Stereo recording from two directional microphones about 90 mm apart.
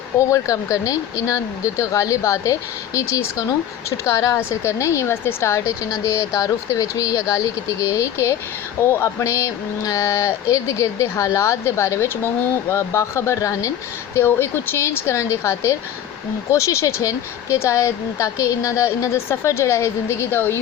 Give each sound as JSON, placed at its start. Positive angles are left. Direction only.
{"t": 0.3, "sound": "a woman's voice", "side_deg": 40}
{"t": 14.2, "sound": "a woman's voice", "side_deg": 25}